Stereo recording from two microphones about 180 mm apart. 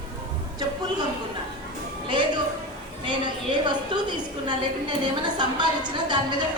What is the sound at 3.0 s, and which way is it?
A woman's voice, 25° right (ahead or behind).